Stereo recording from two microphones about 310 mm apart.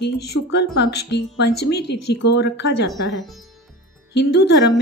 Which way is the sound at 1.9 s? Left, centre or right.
Left.